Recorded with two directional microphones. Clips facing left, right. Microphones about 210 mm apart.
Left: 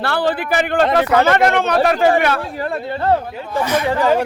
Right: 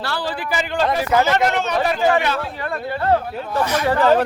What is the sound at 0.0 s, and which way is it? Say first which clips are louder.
Speech: left 6 dB; 60° left (ahead or behind).